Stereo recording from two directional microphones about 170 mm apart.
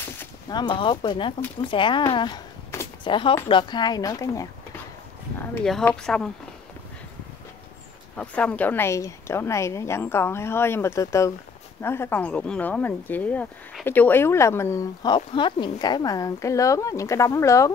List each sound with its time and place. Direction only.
0.5 s speech: 25° left (ahead or behind); by 6.3 s 5° left (ahead or behind)
8.2 s speech: 5° left (ahead or behind)